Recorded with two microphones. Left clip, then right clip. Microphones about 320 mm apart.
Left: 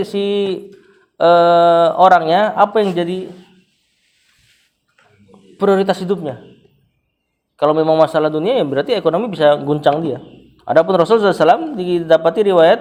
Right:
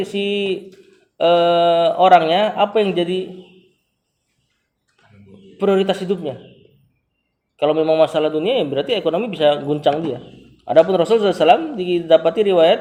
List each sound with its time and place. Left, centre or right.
0.1 s a man's voice: left
5.5 s a man's voice: left
7.5 s a man's voice: left